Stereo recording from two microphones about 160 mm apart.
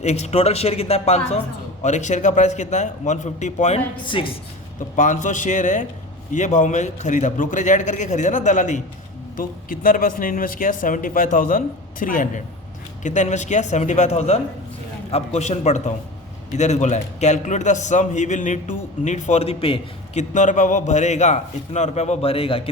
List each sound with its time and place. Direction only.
0.0 s a man's voice: 45° left (ahead or behind)
3.9 s speech: 30° left (ahead or behind)
4.9 s a man's voice: 50° left (ahead or behind)
9.4 s a man's voice: 60° left (ahead or behind); by 20.2 s 40° left (ahead or behind)
20.3 s a man's voice: 50° left (ahead or behind)